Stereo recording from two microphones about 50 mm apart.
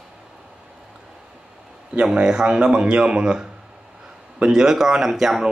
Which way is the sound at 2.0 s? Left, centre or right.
Centre.